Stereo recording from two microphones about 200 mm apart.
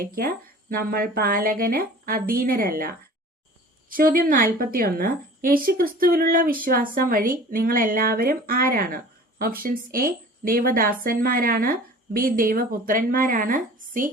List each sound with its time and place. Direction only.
0.0 s a woman's voice: 45° right (ahead or behind)